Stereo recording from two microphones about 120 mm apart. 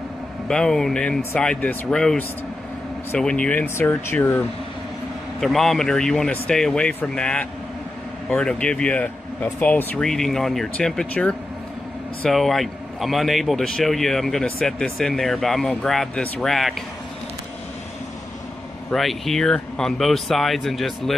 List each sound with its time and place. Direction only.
0.5 s a man's voice: 5° left (ahead or behind)
5.4 s a man's voice: centre (ahead or behind)
18.9 s a man's voice: centre (ahead or behind)